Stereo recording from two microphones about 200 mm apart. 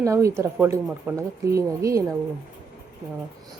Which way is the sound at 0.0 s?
15° right (ahead or behind).